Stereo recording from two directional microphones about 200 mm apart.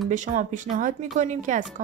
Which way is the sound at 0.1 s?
40° right (ahead or behind).